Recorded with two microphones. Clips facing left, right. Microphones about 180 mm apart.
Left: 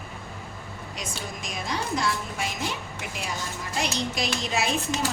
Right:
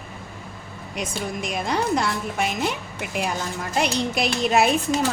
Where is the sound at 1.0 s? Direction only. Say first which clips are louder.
Right 9 dB; 60° right (ahead or behind).